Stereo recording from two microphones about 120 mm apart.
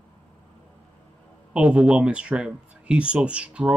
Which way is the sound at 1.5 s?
10° right (ahead or behind).